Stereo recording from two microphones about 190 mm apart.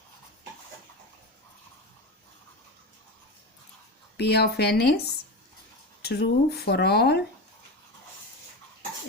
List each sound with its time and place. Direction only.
4.2 s speech: 60° left (ahead or behind)